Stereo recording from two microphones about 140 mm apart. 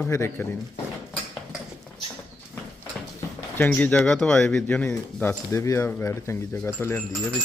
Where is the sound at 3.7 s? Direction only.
10° left (ahead or behind).